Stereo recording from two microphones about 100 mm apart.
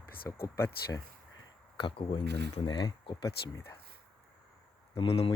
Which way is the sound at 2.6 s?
45° left (ahead or behind).